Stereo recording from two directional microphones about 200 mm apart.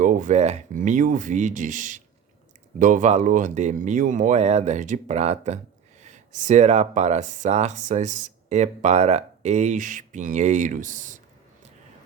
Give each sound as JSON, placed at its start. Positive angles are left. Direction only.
{"t": 0.0, "sound": "speech", "side_deg": -40}